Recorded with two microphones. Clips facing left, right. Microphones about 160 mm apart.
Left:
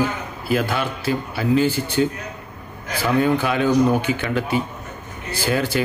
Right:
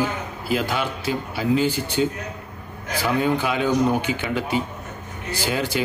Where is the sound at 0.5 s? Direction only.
15° right (ahead or behind).